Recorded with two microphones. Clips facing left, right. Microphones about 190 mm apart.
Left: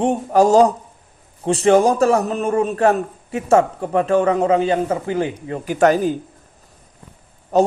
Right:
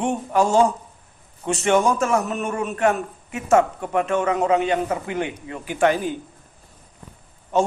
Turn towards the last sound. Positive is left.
turn(degrees=40)  # may be behind; listen again after turning